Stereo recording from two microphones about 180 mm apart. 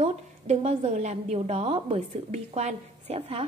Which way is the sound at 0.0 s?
35° right (ahead or behind).